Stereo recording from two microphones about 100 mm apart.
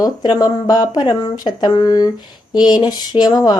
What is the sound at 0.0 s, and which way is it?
Speech, 40° left (ahead or behind).